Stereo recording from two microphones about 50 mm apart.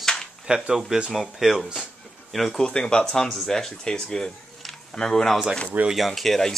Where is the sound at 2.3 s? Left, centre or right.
Centre.